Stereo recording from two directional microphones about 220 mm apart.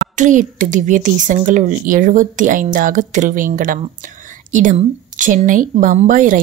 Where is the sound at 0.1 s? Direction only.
35° right (ahead or behind).